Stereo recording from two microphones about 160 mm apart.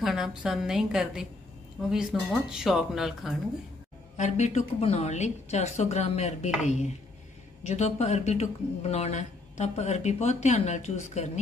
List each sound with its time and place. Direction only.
0.0 s a woman's voice: 5° right (ahead or behind)
4.2 s speech: 45° left (ahead or behind)